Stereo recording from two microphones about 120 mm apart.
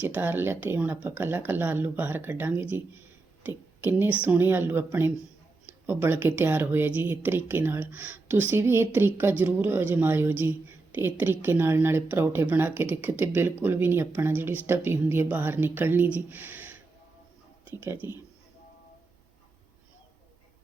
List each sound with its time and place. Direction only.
0.0 s speech: 15° right (ahead or behind)